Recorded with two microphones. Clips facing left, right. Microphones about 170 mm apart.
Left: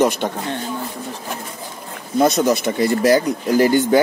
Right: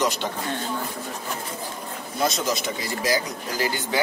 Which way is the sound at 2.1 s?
55° left (ahead or behind).